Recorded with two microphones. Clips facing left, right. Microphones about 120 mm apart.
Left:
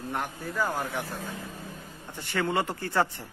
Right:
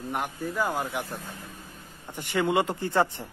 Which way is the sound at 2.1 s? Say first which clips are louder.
Right 3 dB; 15° right (ahead or behind).